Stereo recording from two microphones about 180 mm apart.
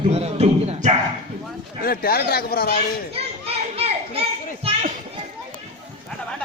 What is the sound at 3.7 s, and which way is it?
Children playing, 35° right (ahead or behind).